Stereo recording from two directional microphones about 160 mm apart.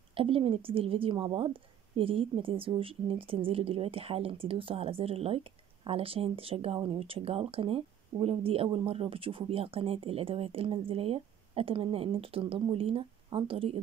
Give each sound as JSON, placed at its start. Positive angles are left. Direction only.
{"t": 0.1, "sound": "speech", "side_deg": -35}